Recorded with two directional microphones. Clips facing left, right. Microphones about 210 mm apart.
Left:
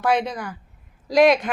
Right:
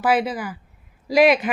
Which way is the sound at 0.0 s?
5° right (ahead or behind).